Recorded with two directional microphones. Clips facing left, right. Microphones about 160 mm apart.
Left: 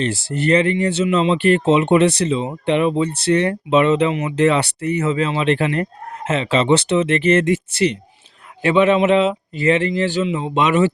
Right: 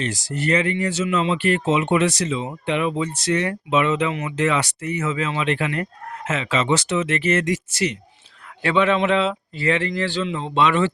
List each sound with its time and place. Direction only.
0.0 s speech: 30° left (ahead or behind)